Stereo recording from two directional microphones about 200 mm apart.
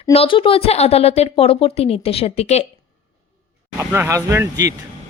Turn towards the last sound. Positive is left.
turn(degrees=-15)  # may be behind; listen again after turning